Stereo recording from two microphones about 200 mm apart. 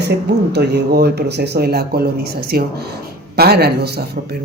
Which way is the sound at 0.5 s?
55° right (ahead or behind).